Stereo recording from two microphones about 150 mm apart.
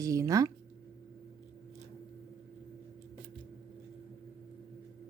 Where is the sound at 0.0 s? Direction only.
20° right (ahead or behind).